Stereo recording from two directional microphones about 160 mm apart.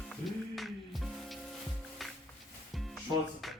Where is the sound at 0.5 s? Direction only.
Centre (ahead or behind).